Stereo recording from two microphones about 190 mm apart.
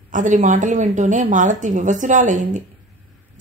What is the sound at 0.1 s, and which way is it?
A woman's voice, 40° right (ahead or behind).